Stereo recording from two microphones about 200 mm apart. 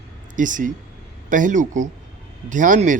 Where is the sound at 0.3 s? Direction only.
40° right (ahead or behind).